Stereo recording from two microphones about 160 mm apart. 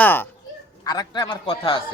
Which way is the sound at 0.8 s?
25° left (ahead or behind).